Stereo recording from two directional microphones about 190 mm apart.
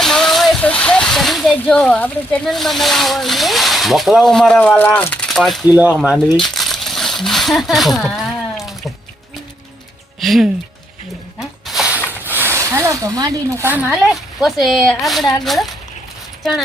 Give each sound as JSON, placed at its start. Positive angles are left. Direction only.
{"t": 0.0, "sound": "speech", "side_deg": 0}
{"t": 10.2, "sound": "speech", "side_deg": 0}
{"t": 11.3, "sound": "a sound", "side_deg": 0}
{"t": 12.2, "sound": "speech", "side_deg": -10}